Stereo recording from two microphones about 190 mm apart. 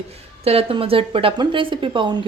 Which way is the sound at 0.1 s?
30° right (ahead or behind).